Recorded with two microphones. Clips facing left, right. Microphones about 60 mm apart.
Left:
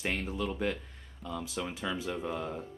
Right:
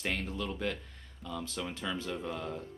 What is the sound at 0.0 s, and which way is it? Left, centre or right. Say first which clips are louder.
Speech: left 2 dB; centre.